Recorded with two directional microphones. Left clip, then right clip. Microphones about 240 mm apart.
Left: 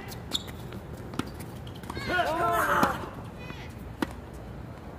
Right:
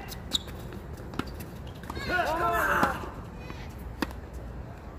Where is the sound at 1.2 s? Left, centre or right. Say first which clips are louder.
Even; left.